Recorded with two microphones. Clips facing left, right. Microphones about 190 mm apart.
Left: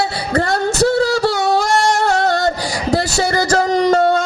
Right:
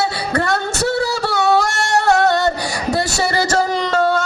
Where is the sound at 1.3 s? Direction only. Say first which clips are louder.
Left 1 dB; 60° right (ahead or behind).